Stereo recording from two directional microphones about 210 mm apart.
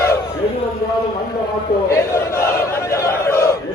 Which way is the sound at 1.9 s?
15° left (ahead or behind).